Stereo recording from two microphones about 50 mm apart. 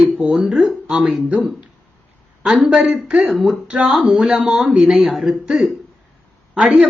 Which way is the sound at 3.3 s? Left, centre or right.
Centre.